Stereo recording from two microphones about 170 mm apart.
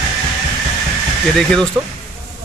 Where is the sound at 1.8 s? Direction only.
15° right (ahead or behind).